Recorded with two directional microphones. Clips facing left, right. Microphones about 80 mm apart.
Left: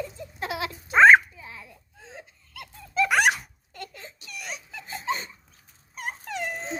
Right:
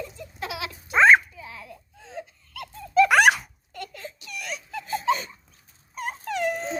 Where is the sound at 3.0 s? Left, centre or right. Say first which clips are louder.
Right 2 dB; right.